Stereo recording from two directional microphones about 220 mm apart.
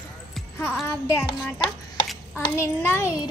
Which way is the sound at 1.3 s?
20° left (ahead or behind).